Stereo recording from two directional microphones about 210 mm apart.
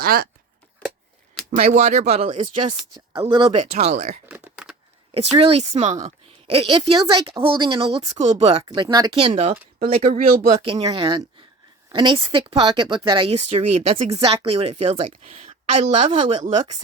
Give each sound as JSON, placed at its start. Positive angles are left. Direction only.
{"t": 0.0, "sound": "speech", "side_deg": -45}
{"t": 1.5, "sound": "speech", "side_deg": -30}
{"t": 4.3, "sound": "a sound", "side_deg": -5}
{"t": 5.1, "sound": "speech", "side_deg": -30}
{"t": 10.6, "sound": "speech", "side_deg": -20}